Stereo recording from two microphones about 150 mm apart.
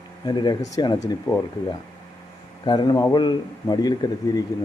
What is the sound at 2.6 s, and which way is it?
A man's voice, 30° left (ahead or behind).